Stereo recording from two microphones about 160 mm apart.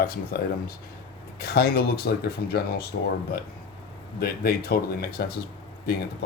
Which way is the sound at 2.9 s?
70° left (ahead or behind).